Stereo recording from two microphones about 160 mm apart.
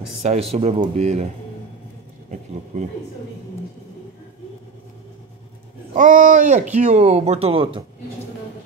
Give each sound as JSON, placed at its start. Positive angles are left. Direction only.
{"t": 0.2, "sound": "speech", "side_deg": -40}
{"t": 5.9, "sound": "speech", "side_deg": -55}
{"t": 6.9, "sound": "speech", "side_deg": -40}